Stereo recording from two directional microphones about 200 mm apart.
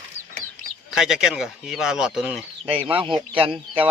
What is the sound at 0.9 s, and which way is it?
Speech, centre (ahead or behind).